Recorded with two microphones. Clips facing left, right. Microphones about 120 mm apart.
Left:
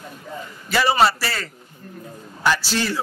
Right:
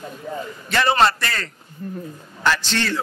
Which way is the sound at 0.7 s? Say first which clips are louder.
Even; 5° left (ahead or behind).